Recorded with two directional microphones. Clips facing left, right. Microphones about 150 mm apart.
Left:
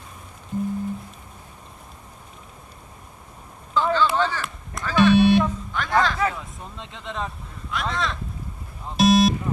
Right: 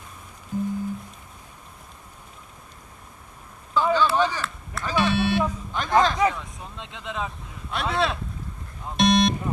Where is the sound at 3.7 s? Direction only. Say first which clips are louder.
Even; 10° right (ahead or behind).